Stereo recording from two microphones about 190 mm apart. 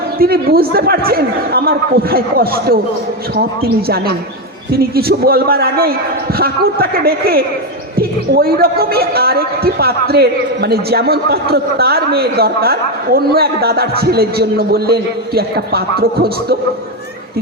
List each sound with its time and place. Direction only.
0.2 s a man's voice: 50° right (ahead or behind)